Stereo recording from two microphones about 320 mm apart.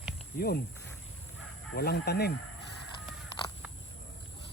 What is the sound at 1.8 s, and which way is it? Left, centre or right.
Speech, left.